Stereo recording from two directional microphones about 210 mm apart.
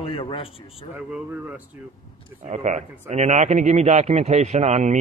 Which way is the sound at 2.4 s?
30° right (ahead or behind).